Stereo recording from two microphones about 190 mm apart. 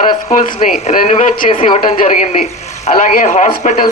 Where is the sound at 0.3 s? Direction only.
40° left (ahead or behind).